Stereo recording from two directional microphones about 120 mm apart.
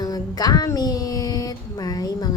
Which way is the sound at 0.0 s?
30° left (ahead or behind).